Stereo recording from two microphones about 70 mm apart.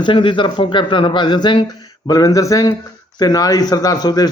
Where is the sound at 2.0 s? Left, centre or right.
Left.